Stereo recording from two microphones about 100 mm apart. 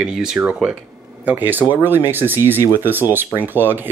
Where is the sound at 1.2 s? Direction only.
20° right (ahead or behind).